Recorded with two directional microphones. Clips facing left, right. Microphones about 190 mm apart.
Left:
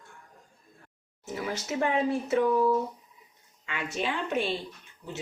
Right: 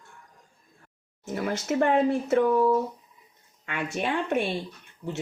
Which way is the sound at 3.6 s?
55° right (ahead or behind).